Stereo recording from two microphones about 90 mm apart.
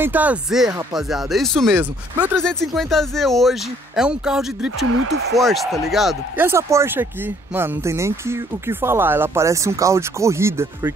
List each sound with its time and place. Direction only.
0.0 s speech: 20° right (ahead or behind)
0.5 s speech: 5° right (ahead or behind)
1.8 s speech: 20° right (ahead or behind)
2.3 s speech: 5° left (ahead or behind)
6.3 s speech: 30° right (ahead or behind)